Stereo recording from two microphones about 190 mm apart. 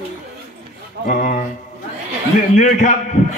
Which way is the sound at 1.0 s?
45° left (ahead or behind).